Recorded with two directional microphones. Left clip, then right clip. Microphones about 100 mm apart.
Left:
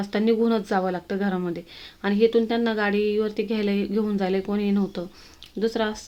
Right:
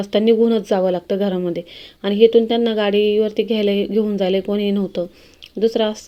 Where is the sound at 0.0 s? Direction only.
30° right (ahead or behind).